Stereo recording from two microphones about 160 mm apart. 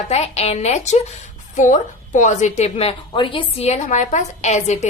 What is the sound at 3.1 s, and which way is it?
A woman's voice, 30° left (ahead or behind).